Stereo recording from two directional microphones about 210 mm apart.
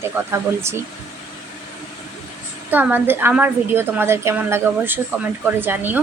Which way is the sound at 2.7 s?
10° right (ahead or behind).